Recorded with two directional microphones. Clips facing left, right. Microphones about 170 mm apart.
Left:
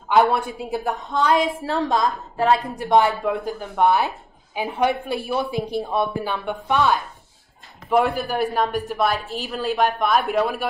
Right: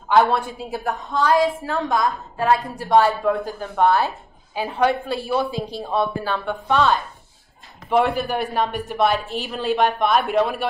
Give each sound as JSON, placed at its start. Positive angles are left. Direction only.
{"t": 0.2, "sound": "a woman's voice", "side_deg": 20}
{"t": 7.9, "sound": "speech", "side_deg": 0}